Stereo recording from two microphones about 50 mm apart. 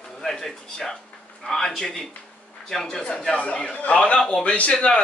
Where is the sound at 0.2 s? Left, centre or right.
Centre.